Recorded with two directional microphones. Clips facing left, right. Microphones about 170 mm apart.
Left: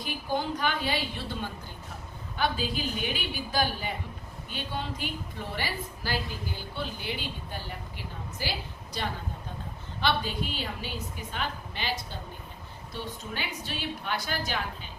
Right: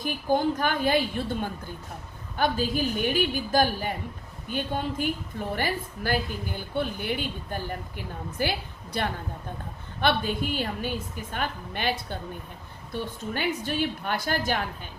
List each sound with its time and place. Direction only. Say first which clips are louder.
0.0 s a woman's voice: right 6 dB; 50° right (ahead or behind)